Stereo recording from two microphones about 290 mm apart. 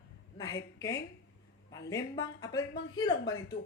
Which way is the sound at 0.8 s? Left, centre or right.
Centre.